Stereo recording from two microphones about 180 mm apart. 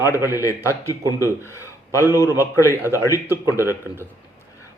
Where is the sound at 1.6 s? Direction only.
15° right (ahead or behind).